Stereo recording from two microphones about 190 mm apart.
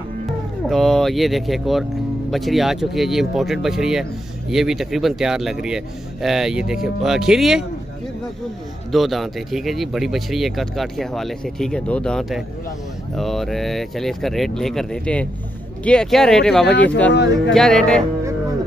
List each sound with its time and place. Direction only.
0.7 s speech: centre (ahead or behind)
8.9 s speech: centre (ahead or behind)
16.7 s speech: 65° left (ahead or behind)
17.6 s speech: 5° left (ahead or behind)